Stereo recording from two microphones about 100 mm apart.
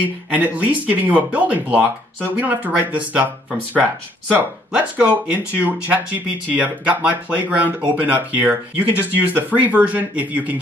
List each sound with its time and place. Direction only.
0.0 s speech: 15° right (ahead or behind)
4.7 s speech: 15° right (ahead or behind)